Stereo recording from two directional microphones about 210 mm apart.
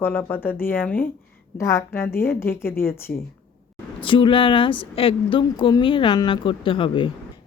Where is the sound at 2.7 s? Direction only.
45° left (ahead or behind).